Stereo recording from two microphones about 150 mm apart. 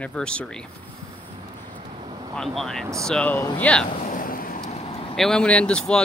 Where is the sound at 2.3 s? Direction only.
5° left (ahead or behind).